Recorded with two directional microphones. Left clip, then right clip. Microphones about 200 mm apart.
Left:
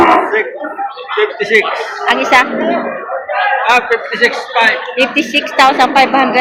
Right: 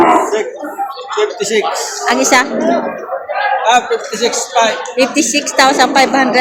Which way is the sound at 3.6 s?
60° right (ahead or behind).